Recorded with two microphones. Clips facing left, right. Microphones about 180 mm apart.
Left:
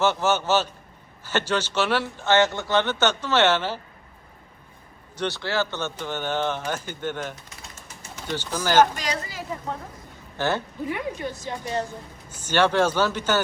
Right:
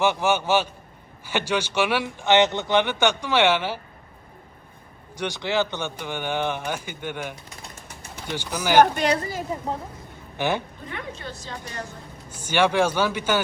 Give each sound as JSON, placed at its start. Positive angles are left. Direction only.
{"t": 0.0, "sound": "speech", "side_deg": -15}
{"t": 5.1, "sound": "speech", "side_deg": -15}
{"t": 8.8, "sound": "a woman's voice", "side_deg": -60}
{"t": 10.3, "sound": "speech", "side_deg": -15}
{"t": 10.8, "sound": "a woman's voice", "side_deg": 10}
{"t": 12.3, "sound": "speech", "side_deg": -10}